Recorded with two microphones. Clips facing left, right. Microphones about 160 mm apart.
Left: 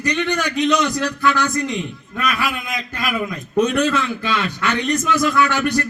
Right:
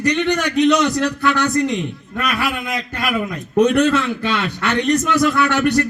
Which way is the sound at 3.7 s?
60° right (ahead or behind).